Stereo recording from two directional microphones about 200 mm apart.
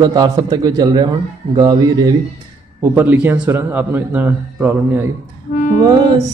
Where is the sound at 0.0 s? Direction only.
20° right (ahead or behind).